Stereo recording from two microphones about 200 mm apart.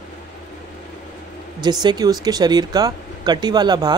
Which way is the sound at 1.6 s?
20° right (ahead or behind).